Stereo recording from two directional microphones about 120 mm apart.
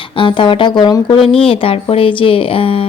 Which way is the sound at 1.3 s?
50° left (ahead or behind).